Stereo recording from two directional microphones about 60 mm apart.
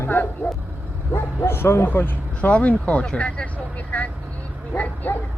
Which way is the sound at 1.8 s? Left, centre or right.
Left.